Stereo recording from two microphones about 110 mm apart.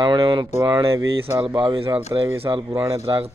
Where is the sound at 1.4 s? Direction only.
45° right (ahead or behind).